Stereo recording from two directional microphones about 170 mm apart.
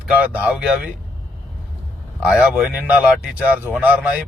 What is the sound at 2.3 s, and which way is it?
Speech, 5° right (ahead or behind).